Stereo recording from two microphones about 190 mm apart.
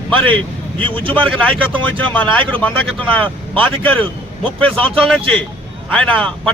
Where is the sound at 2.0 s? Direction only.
5° left (ahead or behind).